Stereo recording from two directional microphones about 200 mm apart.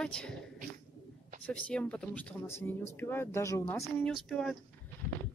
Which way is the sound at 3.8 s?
Centre (ahead or behind).